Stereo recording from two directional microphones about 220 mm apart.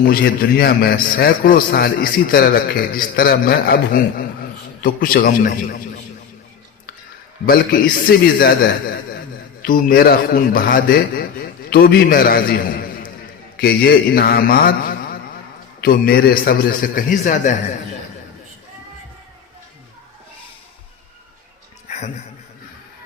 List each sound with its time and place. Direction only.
0.0 s a man's voice: 45° left (ahead or behind)
7.4 s a man's voice: 40° left (ahead or behind)